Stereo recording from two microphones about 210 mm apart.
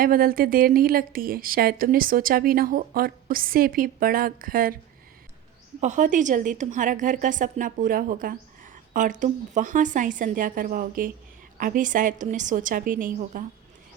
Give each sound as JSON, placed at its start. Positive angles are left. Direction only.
{"t": 0.0, "sound": "a woman's voice", "side_deg": -45}
{"t": 5.8, "sound": "a woman's voice", "side_deg": -35}